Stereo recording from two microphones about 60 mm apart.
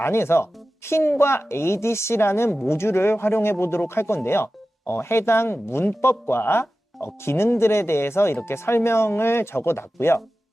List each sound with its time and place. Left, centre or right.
0.0 s speech: left